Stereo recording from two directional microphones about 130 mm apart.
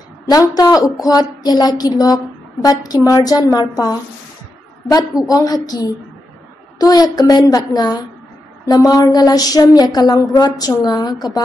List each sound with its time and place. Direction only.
0.3 s a sound: 25° left (ahead or behind)
3.1 s a woman's voice: 25° left (ahead or behind)
5.3 s a woman's voice: 30° left (ahead or behind)